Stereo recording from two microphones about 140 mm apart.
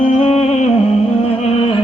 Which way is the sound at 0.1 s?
50° left (ahead or behind).